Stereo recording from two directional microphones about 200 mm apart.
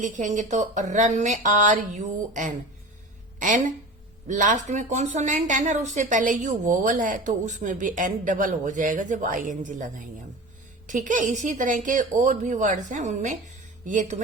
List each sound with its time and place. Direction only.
0.0 s speech: 40° right (ahead or behind)
4.3 s speech: 40° right (ahead or behind)